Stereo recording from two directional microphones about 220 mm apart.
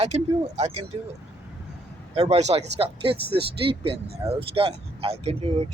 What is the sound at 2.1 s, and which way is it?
Speech, 30° right (ahead or behind).